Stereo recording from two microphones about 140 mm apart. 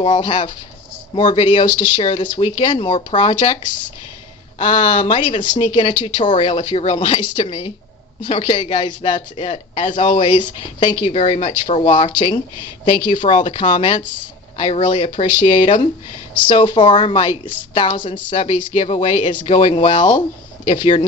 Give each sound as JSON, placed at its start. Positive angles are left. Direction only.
{"t": 0.0, "sound": "speech", "side_deg": 40}
{"t": 11.1, "sound": "speech", "side_deg": 50}
{"t": 13.1, "sound": "speech", "side_deg": 60}
{"t": 13.4, "sound": "speech", "side_deg": 40}
{"t": 18.3, "sound": "speech", "side_deg": 45}